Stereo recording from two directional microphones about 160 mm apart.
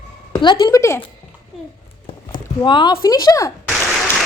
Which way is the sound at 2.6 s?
30° left (ahead or behind).